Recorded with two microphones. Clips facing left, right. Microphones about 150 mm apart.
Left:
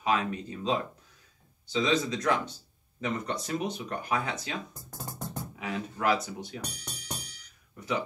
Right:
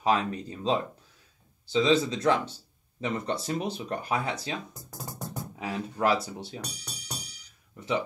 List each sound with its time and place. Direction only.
0.0 s speech: 35° right (ahead or behind)
5.6 s speech: 30° right (ahead or behind)
6.6 s music: 55° left (ahead or behind)